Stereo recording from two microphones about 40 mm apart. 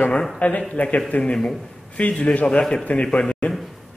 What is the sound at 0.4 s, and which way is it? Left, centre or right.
A man's voice, left.